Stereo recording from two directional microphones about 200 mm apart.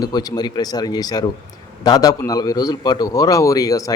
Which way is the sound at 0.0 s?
20° left (ahead or behind).